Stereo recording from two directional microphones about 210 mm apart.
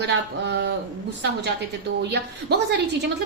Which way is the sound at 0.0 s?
55° right (ahead or behind).